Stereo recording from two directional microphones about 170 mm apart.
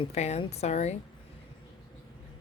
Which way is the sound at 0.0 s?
40° left (ahead or behind).